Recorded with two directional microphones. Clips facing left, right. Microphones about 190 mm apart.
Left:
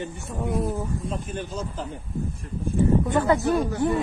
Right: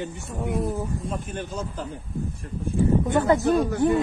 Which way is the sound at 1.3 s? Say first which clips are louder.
Even; 55° right (ahead or behind).